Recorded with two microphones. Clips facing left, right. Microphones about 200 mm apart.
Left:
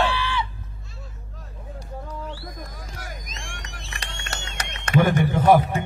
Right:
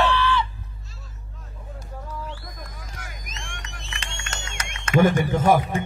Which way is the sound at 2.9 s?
35° left (ahead or behind).